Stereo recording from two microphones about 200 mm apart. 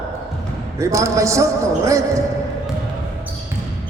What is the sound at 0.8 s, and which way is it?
A man's voice, 15° right (ahead or behind).